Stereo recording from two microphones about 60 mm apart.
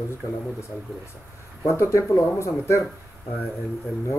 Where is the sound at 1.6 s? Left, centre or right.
Left.